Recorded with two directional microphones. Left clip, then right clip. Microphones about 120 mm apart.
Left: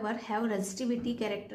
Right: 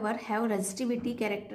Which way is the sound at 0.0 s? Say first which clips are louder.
Right 2 dB; 35° right (ahead or behind).